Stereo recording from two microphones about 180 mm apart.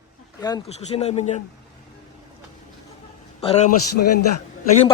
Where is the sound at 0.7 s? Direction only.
35° left (ahead or behind).